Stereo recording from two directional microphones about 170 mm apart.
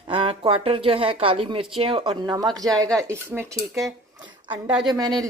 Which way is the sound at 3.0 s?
15° right (ahead or behind).